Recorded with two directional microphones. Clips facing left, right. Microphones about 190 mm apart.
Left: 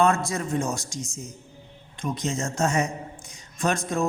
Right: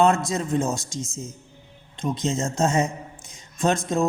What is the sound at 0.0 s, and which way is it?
A woman's voice, 20° right (ahead or behind).